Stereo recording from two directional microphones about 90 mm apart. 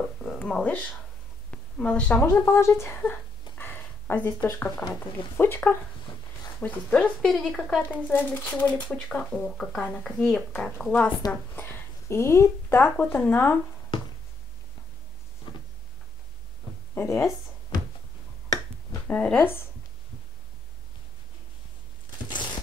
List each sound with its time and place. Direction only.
0.5 s speech: 10° left (ahead or behind); by 3.0 s 30° left (ahead or behind)
3.5 s a sound: 20° left (ahead or behind)
4.6 s speech: 15° left (ahead or behind)
7.8 s speech: 20° left (ahead or behind)
11.5 s speech: 25° left (ahead or behind)
12.9 s speech: 15° left (ahead or behind)
16.9 s speech: 30° left (ahead or behind)
19.0 s speech: 15° left (ahead or behind)
19.3 s speech: 25° left (ahead or behind)